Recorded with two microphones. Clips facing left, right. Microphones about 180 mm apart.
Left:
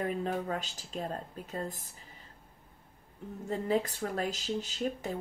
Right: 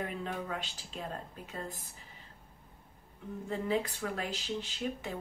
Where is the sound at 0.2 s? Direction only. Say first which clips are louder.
Left 4 dB; 45° left (ahead or behind).